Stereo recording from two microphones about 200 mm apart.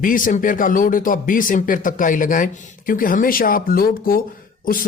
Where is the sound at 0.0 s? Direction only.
40° left (ahead or behind).